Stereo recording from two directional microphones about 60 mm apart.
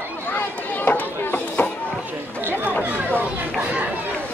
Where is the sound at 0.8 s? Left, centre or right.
Left.